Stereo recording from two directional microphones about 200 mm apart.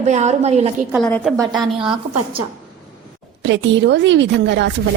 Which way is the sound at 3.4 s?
65° right (ahead or behind).